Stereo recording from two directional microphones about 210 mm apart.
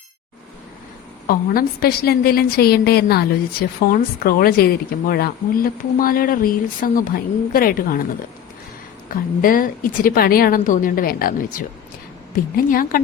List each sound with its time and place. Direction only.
1.3 s a woman's voice: 45° left (ahead or behind)
9.0 s a woman's voice: 40° left (ahead or behind)